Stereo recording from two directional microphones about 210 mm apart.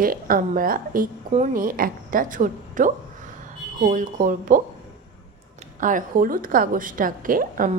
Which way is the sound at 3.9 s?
40° right (ahead or behind).